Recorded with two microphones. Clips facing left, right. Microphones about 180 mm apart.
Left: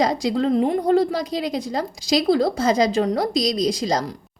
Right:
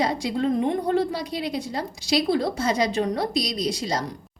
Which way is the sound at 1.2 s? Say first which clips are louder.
Left 4 dB; 40° left (ahead or behind).